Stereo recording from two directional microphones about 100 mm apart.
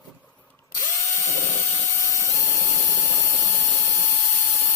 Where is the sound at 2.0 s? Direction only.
30° left (ahead or behind).